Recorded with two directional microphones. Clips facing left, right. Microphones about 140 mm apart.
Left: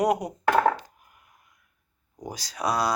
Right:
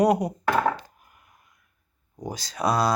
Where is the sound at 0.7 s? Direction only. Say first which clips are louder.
Even; 15° left (ahead or behind).